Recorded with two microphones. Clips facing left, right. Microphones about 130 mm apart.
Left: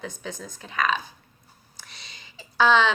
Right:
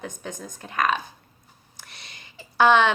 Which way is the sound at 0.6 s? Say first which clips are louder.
Right 2 dB; 50° right (ahead or behind).